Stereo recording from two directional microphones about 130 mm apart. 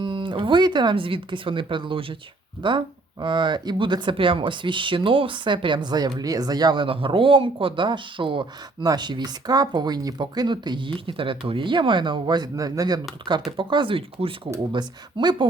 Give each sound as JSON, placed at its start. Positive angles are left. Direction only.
{"t": 0.0, "sound": "speech", "side_deg": -40}